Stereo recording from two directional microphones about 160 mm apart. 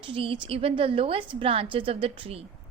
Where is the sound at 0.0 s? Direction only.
35° right (ahead or behind).